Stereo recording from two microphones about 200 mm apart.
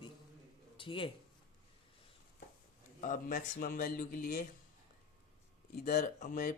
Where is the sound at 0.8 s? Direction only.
25° left (ahead or behind).